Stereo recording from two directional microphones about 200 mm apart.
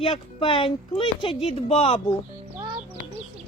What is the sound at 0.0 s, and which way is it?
Speech, 25° left (ahead or behind).